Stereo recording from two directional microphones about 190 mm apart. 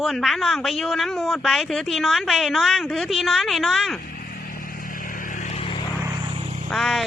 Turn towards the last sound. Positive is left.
turn(degrees=0)  # may be behind; listen again after turning